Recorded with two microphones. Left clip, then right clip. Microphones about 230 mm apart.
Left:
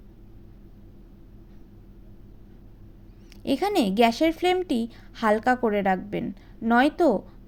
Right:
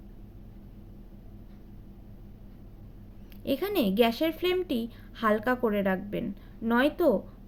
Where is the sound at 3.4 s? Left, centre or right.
Left.